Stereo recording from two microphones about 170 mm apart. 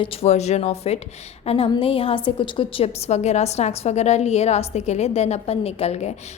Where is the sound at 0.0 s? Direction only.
35° left (ahead or behind).